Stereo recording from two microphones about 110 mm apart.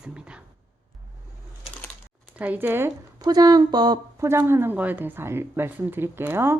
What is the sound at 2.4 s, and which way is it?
Speech, 15° right (ahead or behind).